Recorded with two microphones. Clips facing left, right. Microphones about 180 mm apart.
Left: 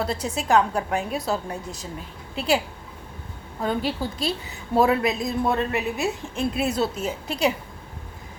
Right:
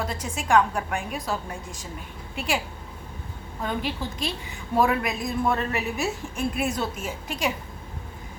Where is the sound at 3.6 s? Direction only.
30° left (ahead or behind).